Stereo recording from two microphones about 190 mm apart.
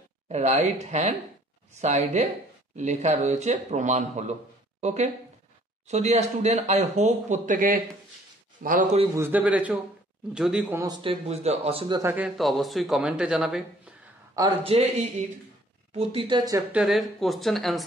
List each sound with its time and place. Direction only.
0.3 s a man's voice: 35° right (ahead or behind)
9.1 s a man's voice: 10° right (ahead or behind)
10.9 s speech: 30° right (ahead or behind)
12.0 s a man's voice: 10° right (ahead or behind)
14.6 s speech: 35° right (ahead or behind)
16.7 s a man's voice: centre (ahead or behind)